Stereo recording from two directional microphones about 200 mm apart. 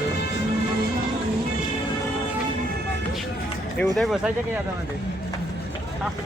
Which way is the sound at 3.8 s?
Centre (ahead or behind).